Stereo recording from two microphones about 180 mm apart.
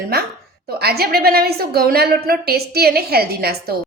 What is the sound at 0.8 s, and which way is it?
A woman's voice, 60° right (ahead or behind).